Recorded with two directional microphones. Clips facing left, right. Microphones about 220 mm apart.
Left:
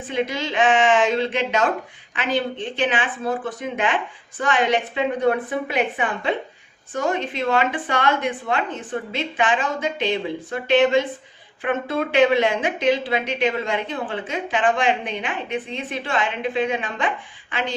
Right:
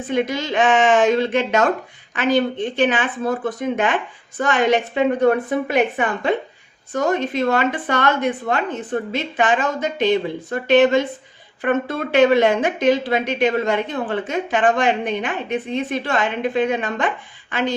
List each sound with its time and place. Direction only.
0.1 s speech: 45° right (ahead or behind)